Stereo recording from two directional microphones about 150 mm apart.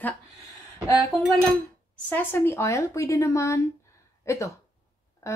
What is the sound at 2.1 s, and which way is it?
Speech, 15° left (ahead or behind).